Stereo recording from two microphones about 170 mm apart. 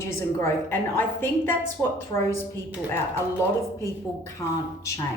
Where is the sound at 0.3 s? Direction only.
15° left (ahead or behind).